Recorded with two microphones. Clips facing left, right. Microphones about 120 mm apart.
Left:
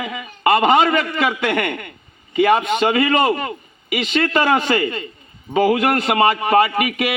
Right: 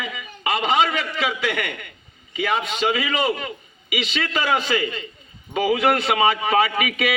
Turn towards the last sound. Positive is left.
turn(degrees=50)  # may be behind; listen again after turning